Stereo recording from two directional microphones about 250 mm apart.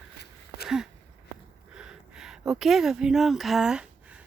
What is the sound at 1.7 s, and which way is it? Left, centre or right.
Speech, centre.